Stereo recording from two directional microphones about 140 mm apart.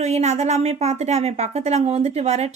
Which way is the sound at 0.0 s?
50° right (ahead or behind).